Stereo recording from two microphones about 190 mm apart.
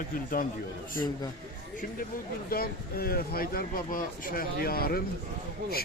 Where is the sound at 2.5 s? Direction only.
50° left (ahead or behind).